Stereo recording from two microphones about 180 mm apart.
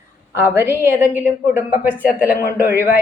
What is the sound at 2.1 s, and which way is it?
Speech, 60° left (ahead or behind).